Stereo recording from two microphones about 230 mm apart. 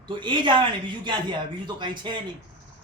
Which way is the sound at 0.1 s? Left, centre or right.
Centre.